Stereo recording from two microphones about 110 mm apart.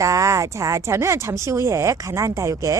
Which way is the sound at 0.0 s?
30° right (ahead or behind).